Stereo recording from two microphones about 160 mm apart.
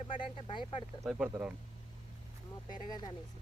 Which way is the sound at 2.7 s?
25° left (ahead or behind).